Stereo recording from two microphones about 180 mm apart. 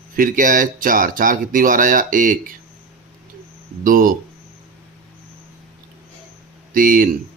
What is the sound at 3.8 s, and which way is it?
Speech, 50° right (ahead or behind).